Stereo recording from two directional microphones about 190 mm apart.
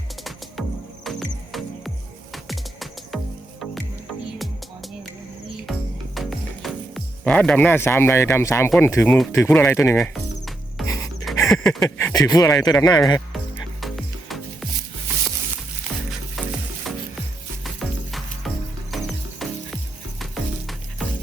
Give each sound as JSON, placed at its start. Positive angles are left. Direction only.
{"t": 1.0, "sound": "music", "side_deg": 0}
{"t": 6.1, "sound": "music", "side_deg": 0}
{"t": 8.8, "sound": "speech", "side_deg": 15}
{"t": 10.0, "sound": "music", "side_deg": 0}
{"t": 10.8, "sound": "music", "side_deg": 15}
{"t": 11.4, "sound": "a sound", "side_deg": 0}
{"t": 11.9, "sound": "speech", "side_deg": 15}
{"t": 13.8, "sound": "music", "side_deg": 0}
{"t": 16.4, "sound": "stir", "side_deg": 0}
{"t": 17.6, "sound": "music", "side_deg": 0}